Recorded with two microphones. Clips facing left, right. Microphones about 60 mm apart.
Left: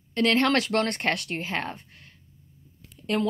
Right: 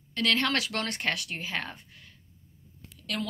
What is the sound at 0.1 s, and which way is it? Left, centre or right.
A woman's voice, left.